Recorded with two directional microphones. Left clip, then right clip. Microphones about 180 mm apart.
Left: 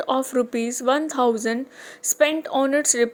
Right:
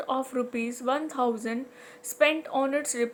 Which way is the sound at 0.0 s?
40° left (ahead or behind).